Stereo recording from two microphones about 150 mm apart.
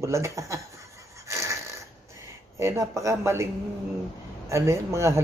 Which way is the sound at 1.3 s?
20° right (ahead or behind).